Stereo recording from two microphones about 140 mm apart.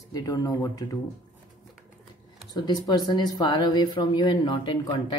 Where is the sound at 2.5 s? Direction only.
30° left (ahead or behind).